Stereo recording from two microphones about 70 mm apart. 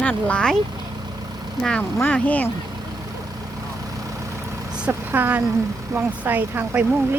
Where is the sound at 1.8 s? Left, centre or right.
Left.